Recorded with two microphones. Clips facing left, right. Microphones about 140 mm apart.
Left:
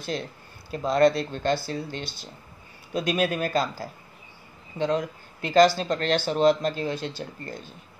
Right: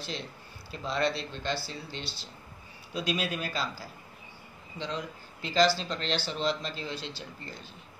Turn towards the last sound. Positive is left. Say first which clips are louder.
# left 7 dB
turn(degrees=50)  # may be behind; listen again after turning